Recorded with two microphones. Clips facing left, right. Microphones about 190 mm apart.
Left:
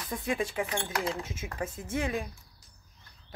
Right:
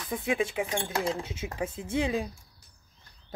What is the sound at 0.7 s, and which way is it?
Speech, 25° right (ahead or behind).